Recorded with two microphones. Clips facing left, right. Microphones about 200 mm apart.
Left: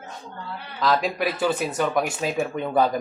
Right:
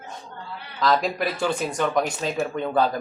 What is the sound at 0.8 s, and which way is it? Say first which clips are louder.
Speech: even; centre (ahead or behind).